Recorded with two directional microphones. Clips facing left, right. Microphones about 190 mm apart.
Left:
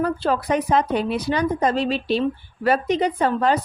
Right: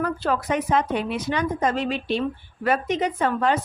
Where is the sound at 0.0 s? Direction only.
30° left (ahead or behind).